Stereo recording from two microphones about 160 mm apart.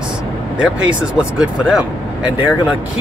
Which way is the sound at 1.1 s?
5° right (ahead or behind).